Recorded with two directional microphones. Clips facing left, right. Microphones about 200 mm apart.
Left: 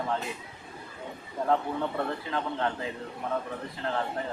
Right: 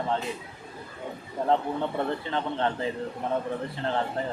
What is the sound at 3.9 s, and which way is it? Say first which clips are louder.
Speech: right 2 dB; 30° right (ahead or behind).